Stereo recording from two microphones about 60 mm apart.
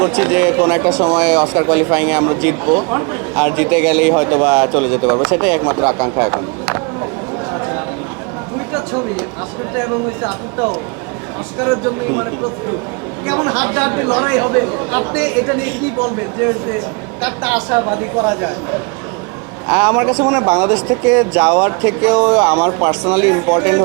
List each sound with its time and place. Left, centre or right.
0.0 s speech: right
7.5 s a sound: right
9.7 s speech: right